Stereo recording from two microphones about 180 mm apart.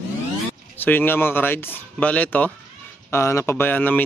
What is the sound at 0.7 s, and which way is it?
Speech, 10° left (ahead or behind).